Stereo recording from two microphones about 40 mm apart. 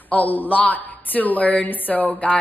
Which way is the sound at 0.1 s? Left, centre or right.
Left.